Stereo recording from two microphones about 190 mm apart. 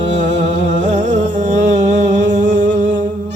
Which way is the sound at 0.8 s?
40° right (ahead or behind).